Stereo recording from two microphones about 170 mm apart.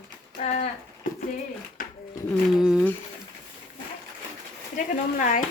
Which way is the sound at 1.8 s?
50° left (ahead or behind).